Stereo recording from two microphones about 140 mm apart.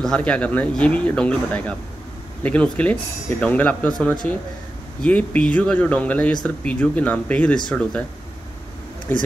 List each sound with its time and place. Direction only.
0.0 s speech: 5° left (ahead or behind)
9.1 s speech: 15° left (ahead or behind)